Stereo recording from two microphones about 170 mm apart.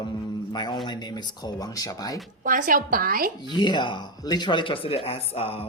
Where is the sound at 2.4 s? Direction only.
50° right (ahead or behind).